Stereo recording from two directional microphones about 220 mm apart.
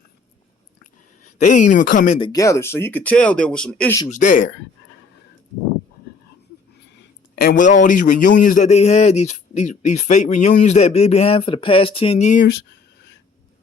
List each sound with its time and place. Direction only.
1.2 s a woman's voice: 35° left (ahead or behind)
2.2 s speech: 15° left (ahead or behind)
4.1 s a man's voice: 35° left (ahead or behind)
7.3 s a man's voice: 40° left (ahead or behind)